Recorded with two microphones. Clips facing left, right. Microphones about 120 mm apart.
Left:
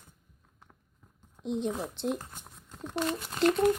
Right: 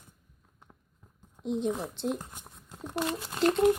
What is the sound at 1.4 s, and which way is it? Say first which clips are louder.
Speech: right 1 dB; centre (ahead or behind).